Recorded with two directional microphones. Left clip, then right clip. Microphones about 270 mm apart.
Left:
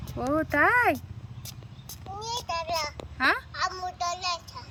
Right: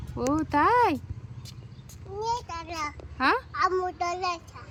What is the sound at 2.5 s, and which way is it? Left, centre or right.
Child singing, centre.